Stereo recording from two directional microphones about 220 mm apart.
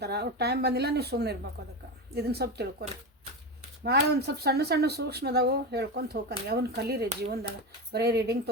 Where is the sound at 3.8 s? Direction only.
50° right (ahead or behind).